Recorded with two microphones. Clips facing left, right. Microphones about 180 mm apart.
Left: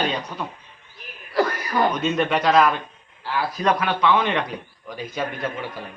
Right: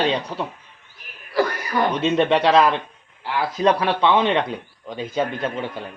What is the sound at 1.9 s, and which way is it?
A man's voice, 30° right (ahead or behind).